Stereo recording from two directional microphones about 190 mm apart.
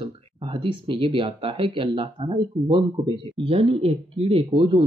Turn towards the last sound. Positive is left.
turn(degrees=-25)  # may be behind; listen again after turning